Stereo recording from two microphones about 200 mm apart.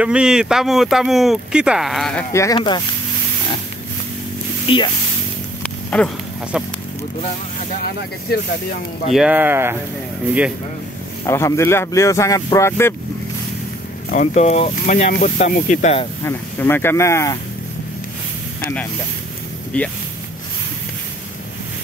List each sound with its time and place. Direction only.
0.0 s speech: 5° right (ahead or behind)
2.3 s speech: 20° left (ahead or behind)
4.6 s speech: 25° left (ahead or behind)
5.6 s a sound: 5° left (ahead or behind)
6.5 s speech: 5° right (ahead or behind)
9.1 s speech: 5° right (ahead or behind)
11.2 s speech: 15° left (ahead or behind)
14.1 s speech: 35° left (ahead or behind)
16.3 s speech: 10° left (ahead or behind)
19.7 s speech: 5° left (ahead or behind)